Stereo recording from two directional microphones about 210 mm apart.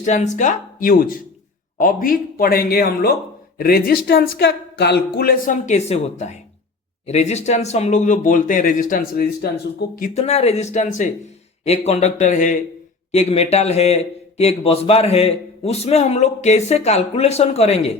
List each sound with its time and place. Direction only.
0.0 s speech: 35° left (ahead or behind)
10.2 s speech: 30° left (ahead or behind)